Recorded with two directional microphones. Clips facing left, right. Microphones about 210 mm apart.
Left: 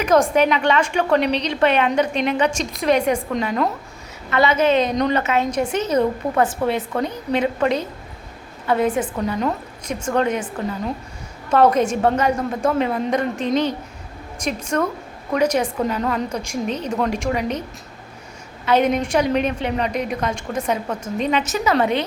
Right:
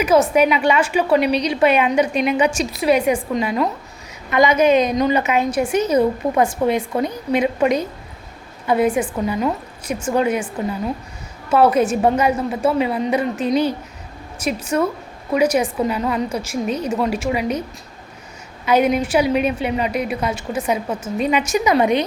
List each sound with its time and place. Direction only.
0.0 s a woman's voice: 5° right (ahead or behind)
4.3 s a woman's voice: 15° right (ahead or behind)
11.5 s a woman's voice: 10° right (ahead or behind)
18.6 s a woman's voice: 10° right (ahead or behind)